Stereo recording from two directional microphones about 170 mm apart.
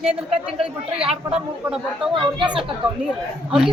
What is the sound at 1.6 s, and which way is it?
Speech, 5° right (ahead or behind).